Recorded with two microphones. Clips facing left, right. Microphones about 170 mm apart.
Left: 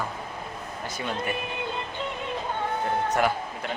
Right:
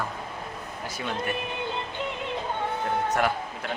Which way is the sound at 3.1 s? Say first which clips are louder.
Left 1 dB; centre (ahead or behind).